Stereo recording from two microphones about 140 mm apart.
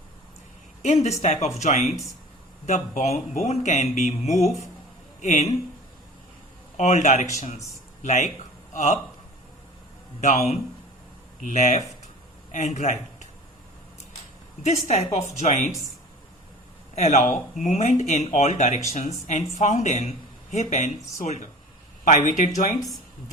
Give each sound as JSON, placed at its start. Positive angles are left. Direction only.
{"t": 0.8, "sound": "speech", "side_deg": 55}
{"t": 6.7, "sound": "a man's voice", "side_deg": 55}
{"t": 10.2, "sound": "a man's voice", "side_deg": 55}
{"t": 14.6, "sound": "speech", "side_deg": 55}
{"t": 16.9, "sound": "speech", "side_deg": 55}
{"t": 22.0, "sound": "speech", "side_deg": 65}